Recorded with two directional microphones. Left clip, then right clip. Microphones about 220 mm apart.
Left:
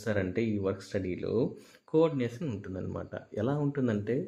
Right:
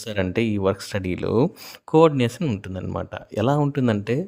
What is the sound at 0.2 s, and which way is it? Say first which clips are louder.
Speech: right 8 dB; 50° right (ahead or behind).